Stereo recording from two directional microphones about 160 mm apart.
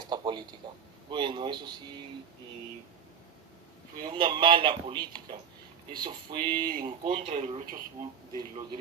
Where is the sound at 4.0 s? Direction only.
30° right (ahead or behind).